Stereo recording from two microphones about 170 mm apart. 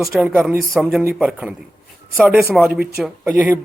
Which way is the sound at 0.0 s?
Centre (ahead or behind).